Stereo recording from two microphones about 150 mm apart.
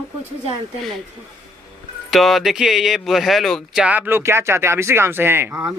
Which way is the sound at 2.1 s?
Centre (ahead or behind).